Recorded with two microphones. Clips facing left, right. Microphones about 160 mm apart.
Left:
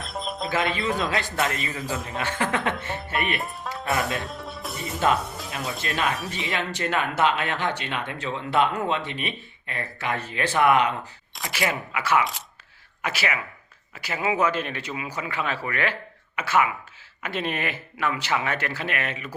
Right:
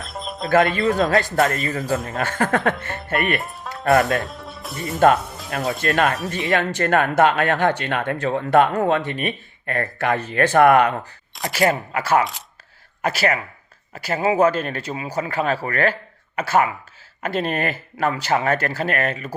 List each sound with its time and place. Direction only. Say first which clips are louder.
0.0 s music: right 1 dB; centre (ahead or behind)
0.5 s speech: right 9 dB; 50° right (ahead or behind)
3.3 s music: right 3 dB; centre (ahead or behind)
4.9 s speech: right 8 dB; 55° right (ahead or behind)
11.5 s speech: right 7 dB; 40° right (ahead or behind)